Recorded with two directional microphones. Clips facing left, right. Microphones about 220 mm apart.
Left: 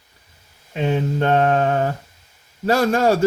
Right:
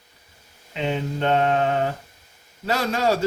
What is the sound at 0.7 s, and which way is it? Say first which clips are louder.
Speech: left 5 dB; 45° left (ahead or behind).